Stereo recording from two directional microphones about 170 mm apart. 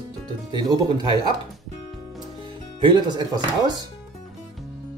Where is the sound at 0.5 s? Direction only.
25° right (ahead or behind).